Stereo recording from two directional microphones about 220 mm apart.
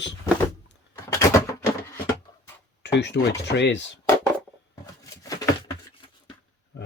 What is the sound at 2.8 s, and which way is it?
Speech, 50° left (ahead or behind).